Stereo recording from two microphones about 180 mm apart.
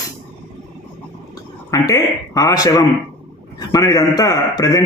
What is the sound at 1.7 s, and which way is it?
A man's voice, 20° left (ahead or behind).